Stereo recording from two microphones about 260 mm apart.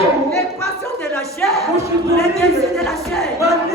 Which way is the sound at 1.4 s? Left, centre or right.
Centre.